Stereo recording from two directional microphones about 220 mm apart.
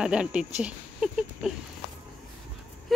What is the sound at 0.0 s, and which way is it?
Speech, 5° right (ahead or behind).